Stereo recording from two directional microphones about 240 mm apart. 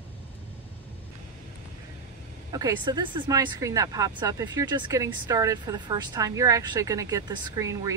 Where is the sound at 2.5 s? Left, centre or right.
Centre.